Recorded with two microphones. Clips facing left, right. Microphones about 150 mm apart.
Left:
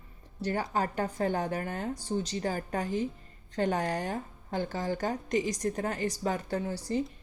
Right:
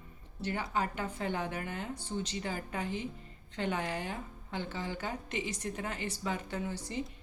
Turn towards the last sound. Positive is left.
turn(degrees=35)  # may be behind; listen again after turning